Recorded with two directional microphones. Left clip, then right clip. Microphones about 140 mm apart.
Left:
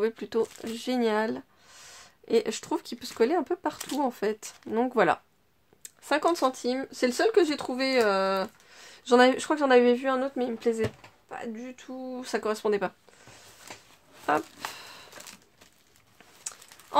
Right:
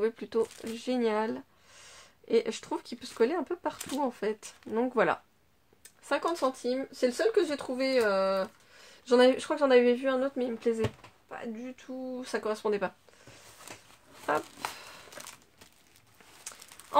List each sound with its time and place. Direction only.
0.0 s speech: 35° left (ahead or behind)
14.3 s speech: 35° left (ahead or behind)